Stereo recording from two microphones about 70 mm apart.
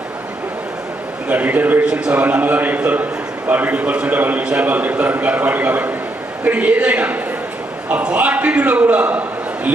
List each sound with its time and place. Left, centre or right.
1.3 s a man's voice: right
1.9 s a man's voice: centre
2.2 s a man's voice: right